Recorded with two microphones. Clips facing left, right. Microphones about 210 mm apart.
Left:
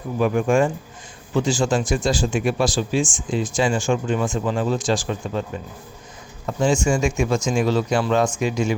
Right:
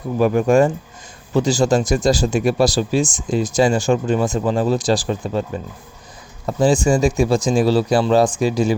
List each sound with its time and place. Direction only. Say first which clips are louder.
0.2 s speech: right 4 dB; 40° right (ahead or behind)
6.4 s speech: right 4 dB; 35° right (ahead or behind)